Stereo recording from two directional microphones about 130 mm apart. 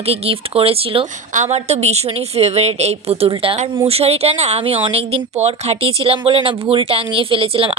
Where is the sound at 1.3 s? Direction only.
60° right (ahead or behind).